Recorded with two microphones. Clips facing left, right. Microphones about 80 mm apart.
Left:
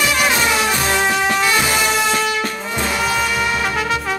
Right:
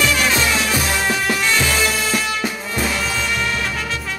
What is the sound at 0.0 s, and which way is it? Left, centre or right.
Music, centre.